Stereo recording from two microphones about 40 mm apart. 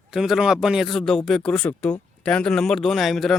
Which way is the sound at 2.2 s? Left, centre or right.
Left.